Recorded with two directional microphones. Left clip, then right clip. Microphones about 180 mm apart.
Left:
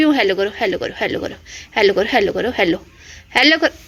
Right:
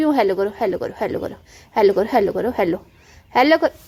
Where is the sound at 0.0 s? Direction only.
20° right (ahead or behind).